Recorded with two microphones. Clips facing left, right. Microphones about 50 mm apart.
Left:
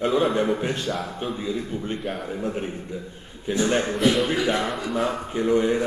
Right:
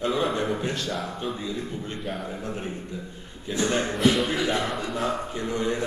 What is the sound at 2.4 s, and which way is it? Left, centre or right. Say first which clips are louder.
A man's voice: left 4 dB; centre.